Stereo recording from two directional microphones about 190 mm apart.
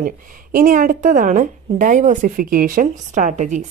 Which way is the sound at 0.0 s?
45° right (ahead or behind).